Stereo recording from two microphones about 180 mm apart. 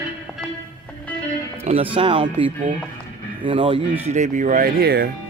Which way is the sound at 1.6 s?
30° right (ahead or behind).